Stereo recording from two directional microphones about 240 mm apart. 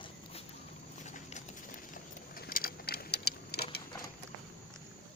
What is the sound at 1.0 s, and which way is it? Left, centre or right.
Keys jangling, left.